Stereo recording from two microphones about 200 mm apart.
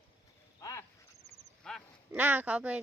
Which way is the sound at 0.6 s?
15° left (ahead or behind).